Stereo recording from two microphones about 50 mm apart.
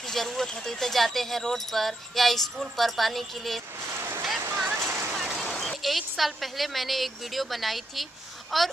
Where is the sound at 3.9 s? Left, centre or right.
Right.